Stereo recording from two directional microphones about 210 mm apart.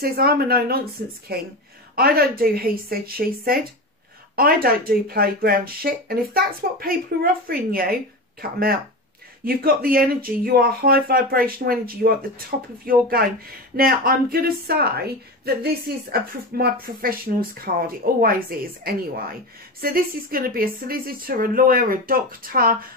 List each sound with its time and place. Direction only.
0.0 s a woman's voice: 45° right (ahead or behind)
19.8 s a woman's voice: 45° right (ahead or behind)